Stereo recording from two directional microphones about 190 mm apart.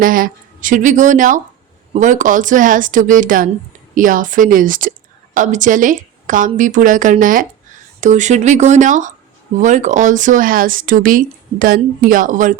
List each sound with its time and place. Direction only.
0.0 s a woman's voice: 45° right (ahead or behind)